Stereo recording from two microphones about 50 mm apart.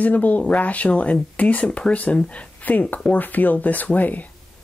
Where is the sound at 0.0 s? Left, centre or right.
Left.